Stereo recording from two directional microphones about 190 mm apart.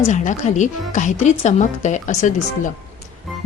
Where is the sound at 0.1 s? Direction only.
40° left (ahead or behind).